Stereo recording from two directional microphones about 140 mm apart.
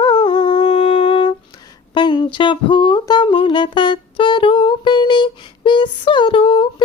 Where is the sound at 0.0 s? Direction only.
35° left (ahead or behind).